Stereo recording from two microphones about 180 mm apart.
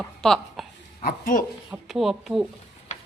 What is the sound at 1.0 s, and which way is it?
Speech, 50° left (ahead or behind).